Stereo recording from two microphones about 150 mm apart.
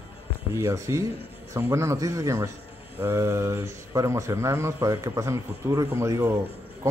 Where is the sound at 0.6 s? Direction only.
20° right (ahead or behind).